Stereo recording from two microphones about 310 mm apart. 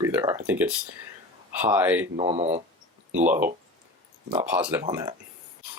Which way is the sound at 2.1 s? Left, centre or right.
Centre.